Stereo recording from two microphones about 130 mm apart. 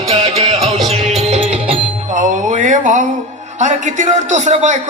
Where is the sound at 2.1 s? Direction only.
70° right (ahead or behind).